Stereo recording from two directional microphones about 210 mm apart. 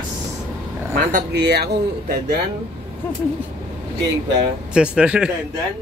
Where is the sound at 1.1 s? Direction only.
50° right (ahead or behind).